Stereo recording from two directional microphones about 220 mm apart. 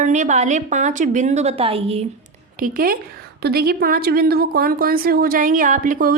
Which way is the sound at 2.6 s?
40° right (ahead or behind).